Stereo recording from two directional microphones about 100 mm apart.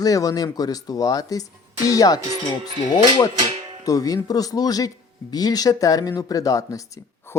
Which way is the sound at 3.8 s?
35° left (ahead or behind).